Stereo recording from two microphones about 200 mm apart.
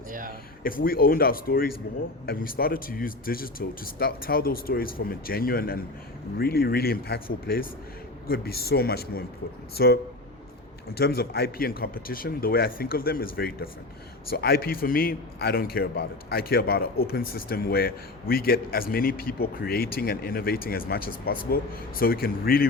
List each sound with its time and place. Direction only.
0.1 s speech: 45° right (ahead or behind)
0.6 s a man's voice: 45° left (ahead or behind)